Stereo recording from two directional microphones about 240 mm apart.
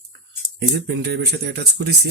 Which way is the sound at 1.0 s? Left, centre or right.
Right.